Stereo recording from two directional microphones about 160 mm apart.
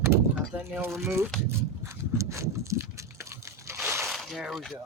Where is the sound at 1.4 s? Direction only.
20° right (ahead or behind).